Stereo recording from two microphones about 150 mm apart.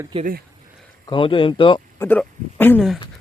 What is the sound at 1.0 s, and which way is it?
Speech, 35° left (ahead or behind).